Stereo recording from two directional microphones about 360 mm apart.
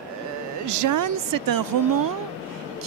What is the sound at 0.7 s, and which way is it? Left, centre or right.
A woman's voice, right.